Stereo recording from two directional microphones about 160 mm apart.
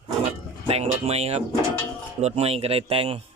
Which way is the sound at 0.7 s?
40° right (ahead or behind).